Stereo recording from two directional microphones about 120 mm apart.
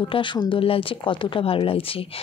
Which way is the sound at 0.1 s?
45° left (ahead or behind).